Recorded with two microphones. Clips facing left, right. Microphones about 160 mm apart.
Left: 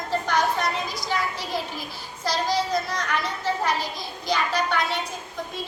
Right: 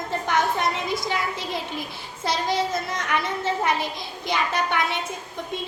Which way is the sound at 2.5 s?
25° right (ahead or behind).